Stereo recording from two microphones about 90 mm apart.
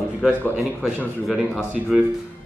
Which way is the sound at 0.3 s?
20° left (ahead or behind).